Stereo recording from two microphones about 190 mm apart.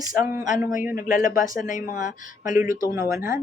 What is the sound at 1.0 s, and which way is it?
Mantra, 45° left (ahead or behind).